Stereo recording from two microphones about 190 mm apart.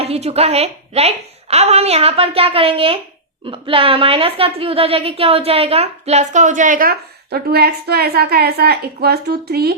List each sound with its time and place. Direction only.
0.0 s a woman's voice: 30° right (ahead or behind); by 9.7 s 55° right (ahead or behind)